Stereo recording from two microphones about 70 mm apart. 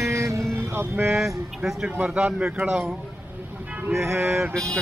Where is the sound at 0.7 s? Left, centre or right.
Right.